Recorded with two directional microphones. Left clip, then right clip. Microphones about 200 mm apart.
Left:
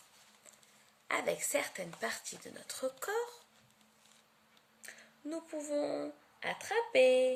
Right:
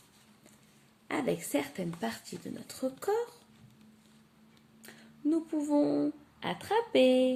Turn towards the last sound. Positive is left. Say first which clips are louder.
# right 2 dB
turn(degrees=25)  # may be behind; listen again after turning